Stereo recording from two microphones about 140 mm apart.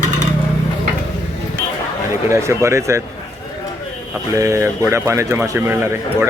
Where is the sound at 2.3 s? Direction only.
20° right (ahead or behind).